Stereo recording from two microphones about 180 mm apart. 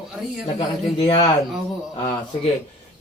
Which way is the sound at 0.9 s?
30° left (ahead or behind).